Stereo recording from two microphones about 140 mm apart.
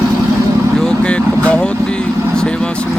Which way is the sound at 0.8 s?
5° left (ahead or behind).